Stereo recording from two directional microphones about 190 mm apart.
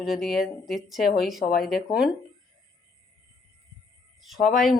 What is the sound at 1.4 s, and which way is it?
Speech, 50° left (ahead or behind).